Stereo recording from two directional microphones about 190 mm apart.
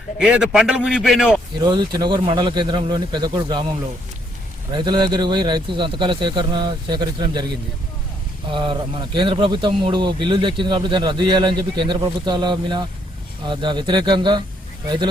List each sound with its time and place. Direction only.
0.2 s a man's voice: 5° right (ahead or behind)
1.5 s a man's voice: 25° right (ahead or behind)
4.7 s a man's voice: 25° right (ahead or behind)
8.5 s a man's voice: 25° right (ahead or behind)